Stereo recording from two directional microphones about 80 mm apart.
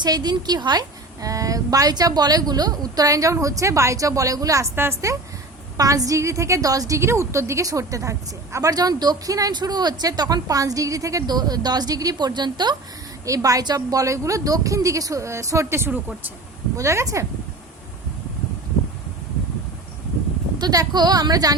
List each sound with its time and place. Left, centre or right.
0.0 s a woman's voice: right
4.7 s a woman's voice: right
9.6 s a woman's voice: right
11.3 s a woman's voice: right
12.1 s a woman's voice: right
13.2 s a woman's voice: right
15.9 s a woman's voice: centre
16.7 s speech: right
20.6 s a woman's voice: right